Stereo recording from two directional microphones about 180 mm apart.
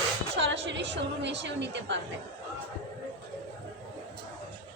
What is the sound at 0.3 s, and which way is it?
A woman's voice, 85° right.